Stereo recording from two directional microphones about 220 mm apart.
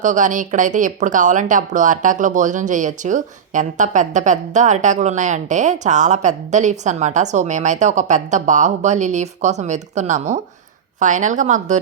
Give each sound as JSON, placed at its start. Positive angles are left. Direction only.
{"t": 0.0, "sound": "speech", "side_deg": -35}